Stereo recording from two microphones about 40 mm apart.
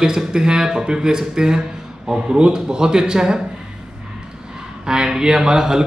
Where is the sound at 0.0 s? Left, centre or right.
Centre.